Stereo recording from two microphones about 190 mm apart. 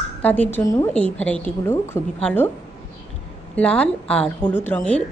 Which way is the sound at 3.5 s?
5° left (ahead or behind).